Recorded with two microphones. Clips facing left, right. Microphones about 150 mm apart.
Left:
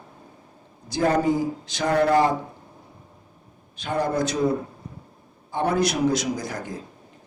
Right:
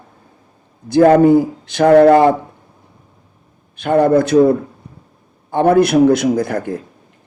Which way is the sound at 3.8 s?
60° right (ahead or behind).